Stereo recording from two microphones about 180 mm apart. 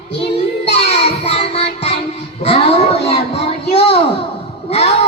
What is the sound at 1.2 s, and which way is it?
Music, 35° left (ahead or behind).